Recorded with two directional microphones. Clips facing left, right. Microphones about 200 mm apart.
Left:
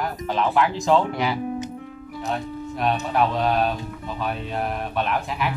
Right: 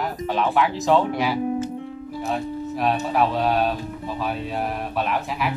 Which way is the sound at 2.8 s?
Centre (ahead or behind).